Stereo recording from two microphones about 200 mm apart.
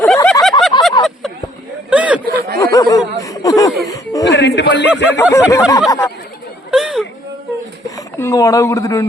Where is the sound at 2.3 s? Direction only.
50° right (ahead or behind).